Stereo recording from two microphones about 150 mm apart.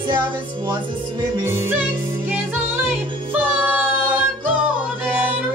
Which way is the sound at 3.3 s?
10° right (ahead or behind).